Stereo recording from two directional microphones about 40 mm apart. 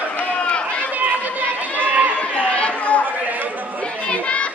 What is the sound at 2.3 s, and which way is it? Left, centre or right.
Chatter, left.